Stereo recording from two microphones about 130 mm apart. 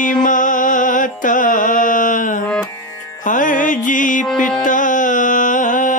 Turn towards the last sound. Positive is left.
turn(degrees=80)